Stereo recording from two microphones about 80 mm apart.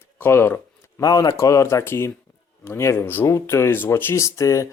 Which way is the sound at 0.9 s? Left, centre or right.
Left.